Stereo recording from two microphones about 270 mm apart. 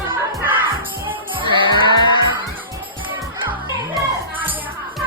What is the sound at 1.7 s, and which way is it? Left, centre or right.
Crowd, centre.